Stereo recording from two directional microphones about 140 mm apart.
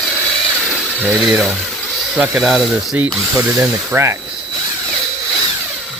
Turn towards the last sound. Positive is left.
turn(degrees=-15)  # may be behind; listen again after turning